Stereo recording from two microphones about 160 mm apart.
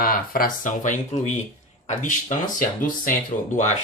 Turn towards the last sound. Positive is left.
turn(degrees=50)  # may be behind; listen again after turning